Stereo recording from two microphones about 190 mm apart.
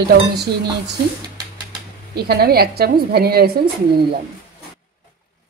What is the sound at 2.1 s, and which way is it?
A woman's voice, 55° right (ahead or behind).